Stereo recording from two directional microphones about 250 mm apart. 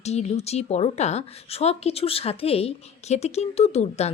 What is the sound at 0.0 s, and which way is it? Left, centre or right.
A woman's voice, left.